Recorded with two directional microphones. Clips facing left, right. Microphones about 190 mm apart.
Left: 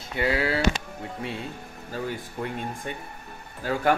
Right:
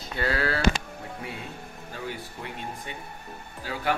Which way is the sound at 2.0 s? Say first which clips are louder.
Left 3 dB; 45° left (ahead or behind).